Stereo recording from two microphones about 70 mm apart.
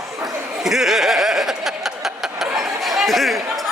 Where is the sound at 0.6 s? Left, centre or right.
Centre.